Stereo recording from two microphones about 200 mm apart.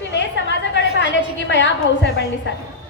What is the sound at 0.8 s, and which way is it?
Speech, 60° left (ahead or behind).